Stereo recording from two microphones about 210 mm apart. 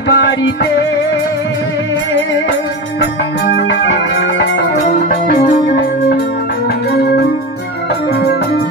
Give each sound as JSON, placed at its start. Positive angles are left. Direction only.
{"t": 0.1, "sound": "music", "side_deg": 60}
{"t": 3.5, "sound": "music", "side_deg": 60}
{"t": 5.3, "sound": "music", "side_deg": 45}